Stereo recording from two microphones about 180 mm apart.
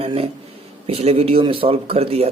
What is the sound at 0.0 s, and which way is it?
Speech, 35° right (ahead or behind).